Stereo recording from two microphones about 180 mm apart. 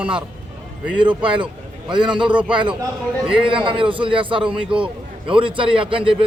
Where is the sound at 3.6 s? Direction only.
30° right (ahead or behind).